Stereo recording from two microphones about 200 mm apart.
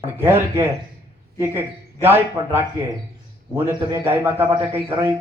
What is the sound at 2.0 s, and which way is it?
A man's voice, 10° right (ahead or behind).